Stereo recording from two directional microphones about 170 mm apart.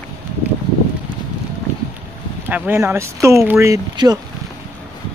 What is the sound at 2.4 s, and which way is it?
Speech, 10° right (ahead or behind).